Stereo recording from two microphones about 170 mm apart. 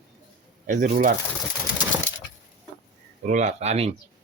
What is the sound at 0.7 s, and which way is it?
Speech, 55° right (ahead or behind).